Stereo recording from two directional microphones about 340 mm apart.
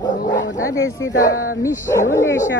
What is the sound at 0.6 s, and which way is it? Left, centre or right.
A woman's voice, centre.